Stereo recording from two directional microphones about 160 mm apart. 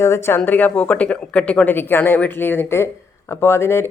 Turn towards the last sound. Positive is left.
turn(degrees=15)  # may be behind; listen again after turning